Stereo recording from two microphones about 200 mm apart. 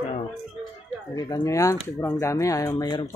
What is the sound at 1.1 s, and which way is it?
Speech, 20° left (ahead or behind).